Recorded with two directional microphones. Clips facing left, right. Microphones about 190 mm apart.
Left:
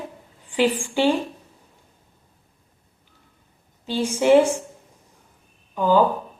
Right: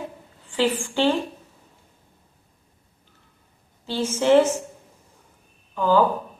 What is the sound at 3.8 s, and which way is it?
Speech, 15° left (ahead or behind).